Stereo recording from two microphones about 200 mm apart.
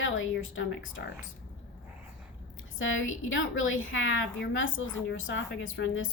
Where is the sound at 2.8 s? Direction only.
75° left (ahead or behind).